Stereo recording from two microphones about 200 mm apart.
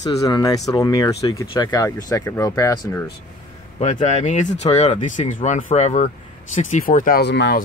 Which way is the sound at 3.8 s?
35° left (ahead or behind).